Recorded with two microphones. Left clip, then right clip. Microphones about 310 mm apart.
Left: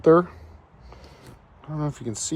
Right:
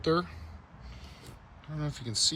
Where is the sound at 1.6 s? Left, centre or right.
Centre.